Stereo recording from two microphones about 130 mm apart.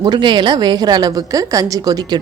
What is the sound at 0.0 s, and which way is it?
A woman's voice, 35° right (ahead or behind).